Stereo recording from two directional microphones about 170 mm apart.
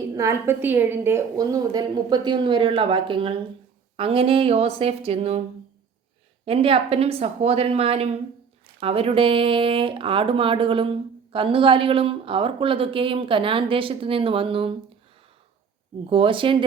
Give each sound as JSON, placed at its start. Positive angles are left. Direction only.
{"t": 0.1, "sound": "a woman's voice", "side_deg": -15}
{"t": 6.4, "sound": "a woman's voice", "side_deg": -35}
{"t": 16.0, "sound": "a woman's voice", "side_deg": -30}